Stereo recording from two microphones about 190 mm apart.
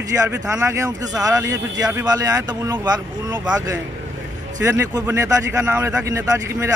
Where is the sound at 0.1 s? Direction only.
15° right (ahead or behind).